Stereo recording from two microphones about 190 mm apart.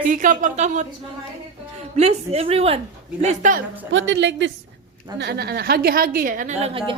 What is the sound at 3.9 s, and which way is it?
A woman's voice, 80° right.